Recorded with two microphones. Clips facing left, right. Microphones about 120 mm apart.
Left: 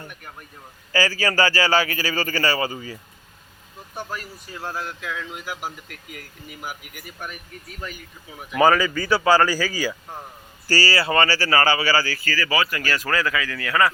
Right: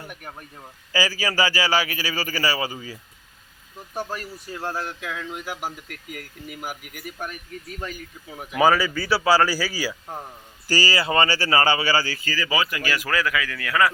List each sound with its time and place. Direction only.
0.9 s a man's voice: 10° right (ahead or behind)
4.6 s a sound: 35° right (ahead or behind)
8.5 s a man's voice: 5° right (ahead or behind)